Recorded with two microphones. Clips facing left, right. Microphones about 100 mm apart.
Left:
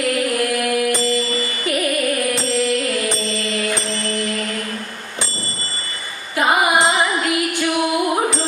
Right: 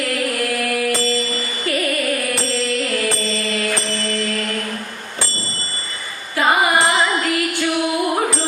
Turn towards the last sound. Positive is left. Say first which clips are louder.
# even
turn(degrees=20)  # may be behind; listen again after turning